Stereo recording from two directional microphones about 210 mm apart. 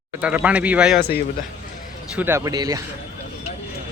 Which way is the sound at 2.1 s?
10° right (ahead or behind).